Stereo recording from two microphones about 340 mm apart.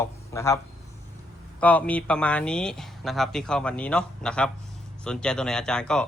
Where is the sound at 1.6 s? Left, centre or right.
Centre.